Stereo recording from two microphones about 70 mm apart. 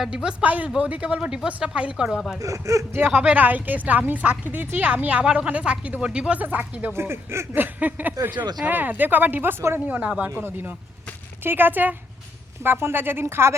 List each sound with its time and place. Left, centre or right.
0.0 s speech: centre
2.0 s speech: centre
2.4 s speech: right
3.1 s speech: right
5.2 s speech: centre
6.9 s speech: right
9.8 s speech: right